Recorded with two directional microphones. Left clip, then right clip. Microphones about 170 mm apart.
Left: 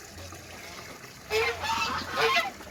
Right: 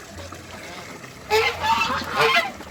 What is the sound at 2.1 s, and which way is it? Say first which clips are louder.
Goose: right 6 dB; 55° right (ahead or behind).